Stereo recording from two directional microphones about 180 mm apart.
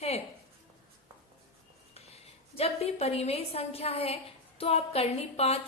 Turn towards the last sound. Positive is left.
turn(degrees=35)  # may be behind; listen again after turning